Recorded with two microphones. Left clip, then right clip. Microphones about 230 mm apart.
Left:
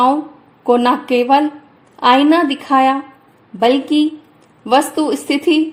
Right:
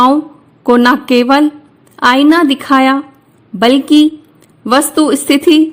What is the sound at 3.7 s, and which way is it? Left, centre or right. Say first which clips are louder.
Speech: right 6 dB; right.